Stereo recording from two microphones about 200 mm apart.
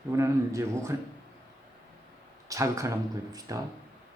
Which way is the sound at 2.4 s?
15° right (ahead or behind).